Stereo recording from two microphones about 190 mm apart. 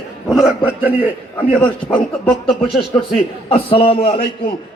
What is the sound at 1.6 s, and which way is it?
A man's voice, 5° left (ahead or behind).